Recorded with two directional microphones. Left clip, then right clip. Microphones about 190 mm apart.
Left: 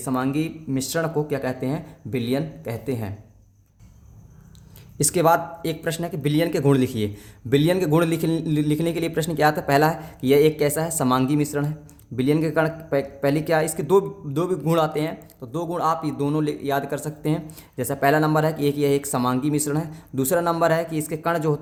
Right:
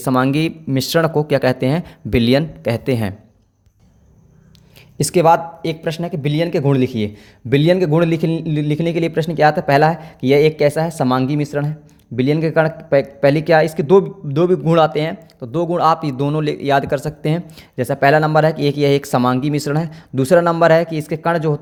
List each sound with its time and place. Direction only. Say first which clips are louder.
0.0 s speech: right 8 dB; 40° right (ahead or behind)
4.9 s a man's voice: right 6 dB; 25° right (ahead or behind)